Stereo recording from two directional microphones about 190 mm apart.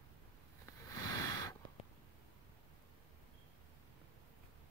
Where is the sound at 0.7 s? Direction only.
20° left (ahead or behind).